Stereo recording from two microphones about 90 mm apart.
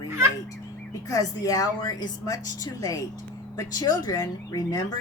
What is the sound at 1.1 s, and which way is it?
Speech, 40° left (ahead or behind).